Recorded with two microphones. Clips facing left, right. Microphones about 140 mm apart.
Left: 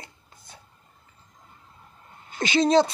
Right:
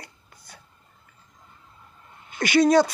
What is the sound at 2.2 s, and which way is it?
Speech, 25° left (ahead or behind).